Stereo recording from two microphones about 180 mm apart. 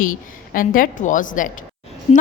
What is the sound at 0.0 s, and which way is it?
A woman's voice, 50° left (ahead or behind).